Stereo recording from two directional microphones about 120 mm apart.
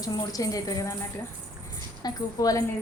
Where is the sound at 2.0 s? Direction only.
30° left (ahead or behind).